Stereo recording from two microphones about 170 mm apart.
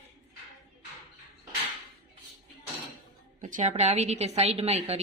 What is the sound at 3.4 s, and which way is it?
A woman's voice, 50° right (ahead or behind).